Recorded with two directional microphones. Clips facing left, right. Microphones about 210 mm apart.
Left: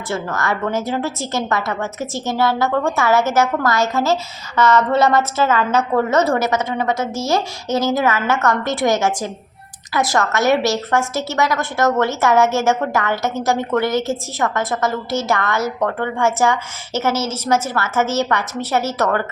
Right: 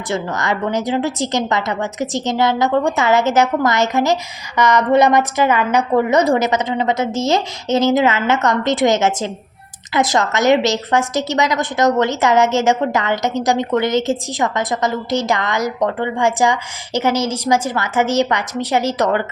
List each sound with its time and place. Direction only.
0.1 s a woman's voice: 15° right (ahead or behind)